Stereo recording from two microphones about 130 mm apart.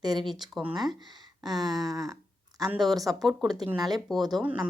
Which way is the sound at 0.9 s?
35° right (ahead or behind).